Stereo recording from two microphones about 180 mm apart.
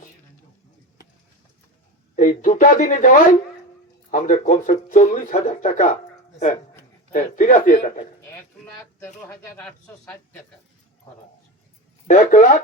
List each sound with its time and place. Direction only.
2.1 s speech: 45° left (ahead or behind)
7.1 s speech: 45° left (ahead or behind)
8.2 s speech: 10° left (ahead or behind)
12.0 s speech: 45° left (ahead or behind)